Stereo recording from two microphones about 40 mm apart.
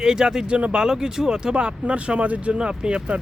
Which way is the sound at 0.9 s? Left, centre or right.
Centre.